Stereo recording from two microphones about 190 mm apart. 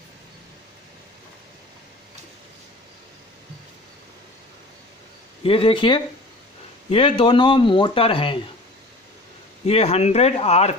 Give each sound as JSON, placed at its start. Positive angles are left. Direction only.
{"t": 5.4, "sound": "speech", "side_deg": 30}
{"t": 9.7, "sound": "speech", "side_deg": 35}